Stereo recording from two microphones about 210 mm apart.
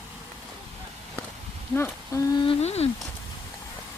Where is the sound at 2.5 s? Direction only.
30° left (ahead or behind).